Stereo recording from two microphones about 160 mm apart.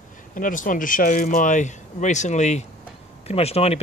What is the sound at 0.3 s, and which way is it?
Speech, 55° left (ahead or behind).